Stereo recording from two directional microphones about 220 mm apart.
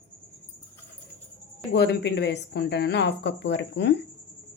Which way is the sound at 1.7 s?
50° left (ahead or behind).